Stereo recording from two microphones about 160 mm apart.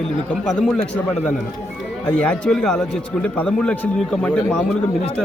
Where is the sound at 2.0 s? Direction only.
5° left (ahead or behind).